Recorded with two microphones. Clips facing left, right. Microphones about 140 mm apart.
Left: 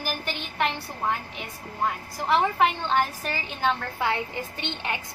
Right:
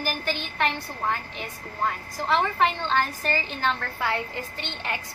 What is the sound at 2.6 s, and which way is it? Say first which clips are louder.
Speech: left 1 dB; 10° left (ahead or behind).